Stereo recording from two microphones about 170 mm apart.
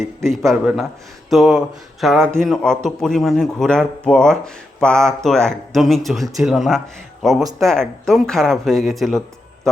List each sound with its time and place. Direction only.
0.0 s speech: centre (ahead or behind)